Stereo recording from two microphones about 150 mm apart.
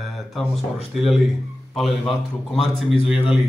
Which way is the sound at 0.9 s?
Centre (ahead or behind).